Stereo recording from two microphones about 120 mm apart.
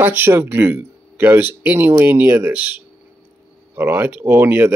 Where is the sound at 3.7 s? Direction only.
15° right (ahead or behind).